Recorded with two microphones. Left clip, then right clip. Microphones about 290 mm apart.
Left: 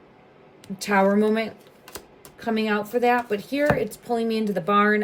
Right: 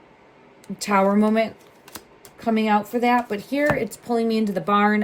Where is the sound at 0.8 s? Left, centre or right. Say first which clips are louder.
Right 1 dB; centre.